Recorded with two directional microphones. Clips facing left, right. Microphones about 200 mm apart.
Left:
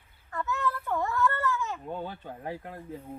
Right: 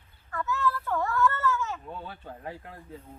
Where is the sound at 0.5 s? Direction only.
15° left (ahead or behind).